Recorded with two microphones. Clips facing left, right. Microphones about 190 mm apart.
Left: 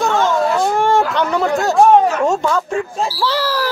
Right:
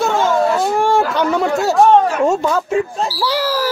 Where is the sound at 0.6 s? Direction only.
Centre (ahead or behind).